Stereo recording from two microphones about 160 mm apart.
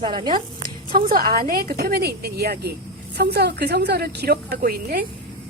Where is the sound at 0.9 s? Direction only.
65° right (ahead or behind).